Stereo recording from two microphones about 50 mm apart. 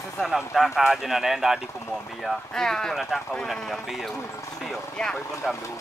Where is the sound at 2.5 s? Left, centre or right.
Centre.